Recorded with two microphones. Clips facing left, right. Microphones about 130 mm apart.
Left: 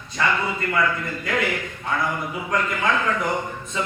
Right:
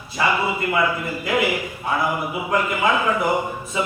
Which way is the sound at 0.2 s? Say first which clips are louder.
Right 2 dB; 15° right (ahead or behind).